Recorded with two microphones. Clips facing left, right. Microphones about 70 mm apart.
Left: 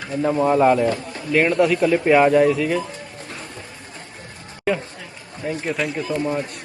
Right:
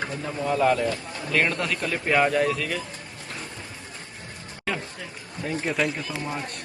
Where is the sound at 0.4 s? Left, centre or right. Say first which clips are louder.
Left 5 dB; left.